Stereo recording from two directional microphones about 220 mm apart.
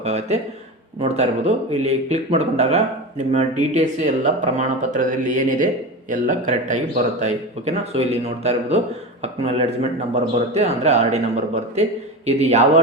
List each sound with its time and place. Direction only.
0.0 s speech: 30° right (ahead or behind)